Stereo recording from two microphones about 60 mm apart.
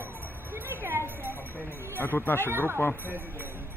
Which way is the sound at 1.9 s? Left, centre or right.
Left.